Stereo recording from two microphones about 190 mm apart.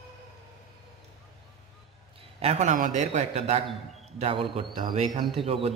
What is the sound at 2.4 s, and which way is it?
A man's voice, 35° right (ahead or behind).